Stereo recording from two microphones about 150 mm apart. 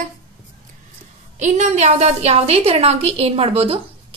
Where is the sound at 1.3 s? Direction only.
50° right (ahead or behind).